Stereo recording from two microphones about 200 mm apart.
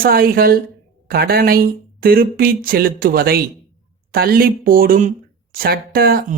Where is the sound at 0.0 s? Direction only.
50° right (ahead or behind).